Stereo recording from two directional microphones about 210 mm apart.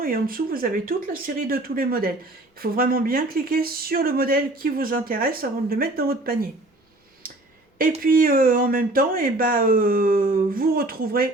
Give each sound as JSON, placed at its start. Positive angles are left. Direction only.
{"t": 0.0, "sound": "speech", "side_deg": -45}
{"t": 7.8, "sound": "speech", "side_deg": -45}